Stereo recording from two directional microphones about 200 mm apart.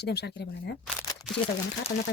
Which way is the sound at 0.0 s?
55° left (ahead or behind).